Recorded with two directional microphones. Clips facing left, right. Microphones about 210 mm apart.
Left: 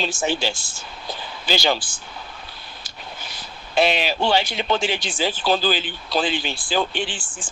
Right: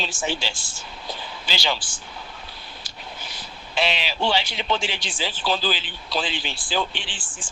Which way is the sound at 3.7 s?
50° left (ahead or behind).